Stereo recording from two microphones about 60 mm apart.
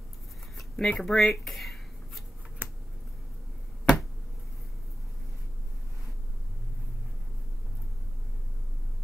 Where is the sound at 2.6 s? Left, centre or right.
Right.